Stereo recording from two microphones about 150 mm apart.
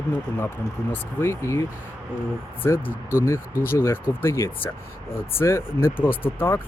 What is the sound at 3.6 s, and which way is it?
Speech, 15° left (ahead or behind).